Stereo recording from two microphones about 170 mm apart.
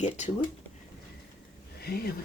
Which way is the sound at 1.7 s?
65° left (ahead or behind).